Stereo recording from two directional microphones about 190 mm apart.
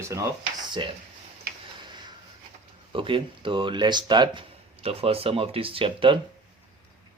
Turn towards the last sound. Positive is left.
turn(degrees=-30)  # may be behind; listen again after turning